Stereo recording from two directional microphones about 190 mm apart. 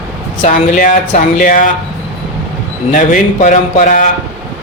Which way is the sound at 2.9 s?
40° left (ahead or behind).